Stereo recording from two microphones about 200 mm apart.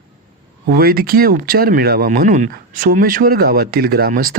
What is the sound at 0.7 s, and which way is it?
Speech, 50° right (ahead or behind).